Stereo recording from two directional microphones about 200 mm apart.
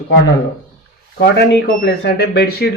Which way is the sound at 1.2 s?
55° left (ahead or behind).